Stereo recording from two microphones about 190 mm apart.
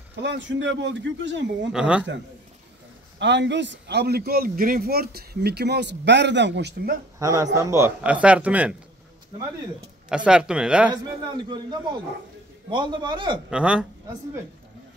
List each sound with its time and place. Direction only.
0.2 s a man's voice: 70° right (ahead or behind)
1.7 s speech: 5° right (ahead or behind)
3.2 s a man's voice: 70° right (ahead or behind)
7.2 s a man's voice: 15° right (ahead or behind)
10.0 s speech: 5° right (ahead or behind)
11.3 s a man's voice: 25° right (ahead or behind)
13.5 s speech: 5° right (ahead or behind)